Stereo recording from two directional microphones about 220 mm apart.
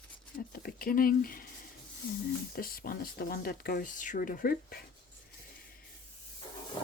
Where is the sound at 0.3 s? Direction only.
40° left (ahead or behind).